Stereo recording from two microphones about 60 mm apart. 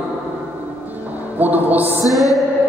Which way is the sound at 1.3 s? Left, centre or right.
Right.